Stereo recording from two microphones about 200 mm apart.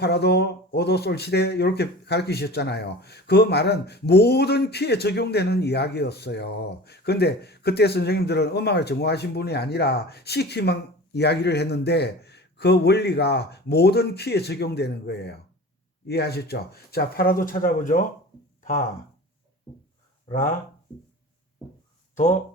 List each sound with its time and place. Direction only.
0.0 s speech: 55° left (ahead or behind)
20.2 s speech: 40° left (ahead or behind)
22.1 s speech: 35° left (ahead or behind)